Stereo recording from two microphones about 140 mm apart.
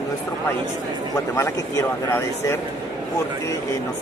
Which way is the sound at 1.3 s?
20° left (ahead or behind).